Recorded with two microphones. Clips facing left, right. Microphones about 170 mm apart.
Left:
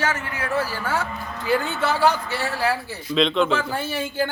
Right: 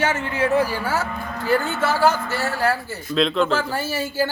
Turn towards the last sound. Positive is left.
turn(degrees=-5)  # may be behind; listen again after turning